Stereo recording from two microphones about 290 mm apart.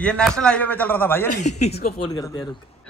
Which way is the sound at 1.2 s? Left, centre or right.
Left.